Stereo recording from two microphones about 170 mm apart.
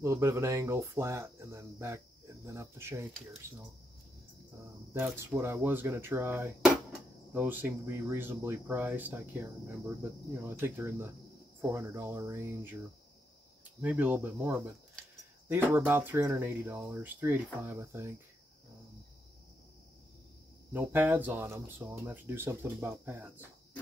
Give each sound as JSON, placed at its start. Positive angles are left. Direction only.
{"t": 0.0, "sound": "speech", "side_deg": -15}
{"t": 4.9, "sound": "speech", "side_deg": -10}
{"t": 10.6, "sound": "speech", "side_deg": -15}
{"t": 13.7, "sound": "speech", "side_deg": -10}
{"t": 20.7, "sound": "speech", "side_deg": -10}